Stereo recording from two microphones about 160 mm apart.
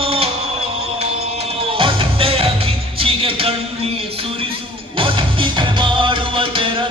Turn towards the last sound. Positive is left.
turn(degrees=-35)  # may be behind; listen again after turning